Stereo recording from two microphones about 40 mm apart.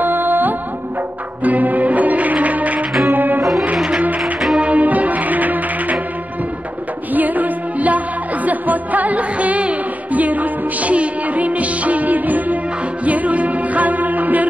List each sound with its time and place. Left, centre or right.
0.0 s music: right
3.1 s music: right
3.7 s music: right
4.2 s music: centre
4.6 s music: right
7.2 s music: right